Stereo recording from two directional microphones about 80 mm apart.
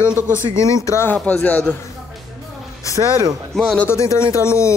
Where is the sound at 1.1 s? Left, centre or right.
Centre.